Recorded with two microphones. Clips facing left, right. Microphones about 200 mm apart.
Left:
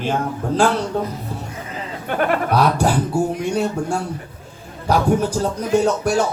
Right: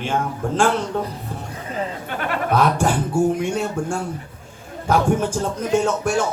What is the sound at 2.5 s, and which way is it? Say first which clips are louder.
Goat: right 3 dB; 35° left (ahead or behind).